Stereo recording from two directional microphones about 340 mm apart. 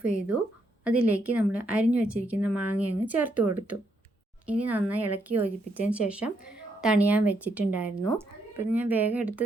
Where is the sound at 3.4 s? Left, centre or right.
Right.